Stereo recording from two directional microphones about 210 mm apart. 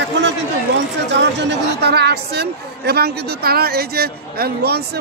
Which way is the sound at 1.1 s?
55° right (ahead or behind).